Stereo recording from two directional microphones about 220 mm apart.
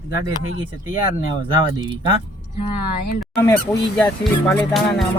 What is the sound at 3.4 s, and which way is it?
Speech, 15° left (ahead or behind).